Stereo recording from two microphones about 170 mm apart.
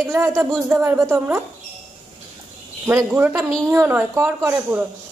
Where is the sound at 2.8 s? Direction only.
10° right (ahead or behind).